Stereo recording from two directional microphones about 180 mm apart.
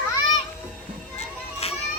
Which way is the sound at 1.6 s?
35° left (ahead or behind).